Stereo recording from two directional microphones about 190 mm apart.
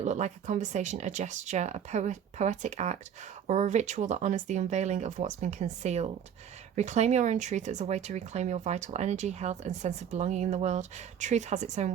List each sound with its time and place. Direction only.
0.0 s speech: 40° right (ahead or behind)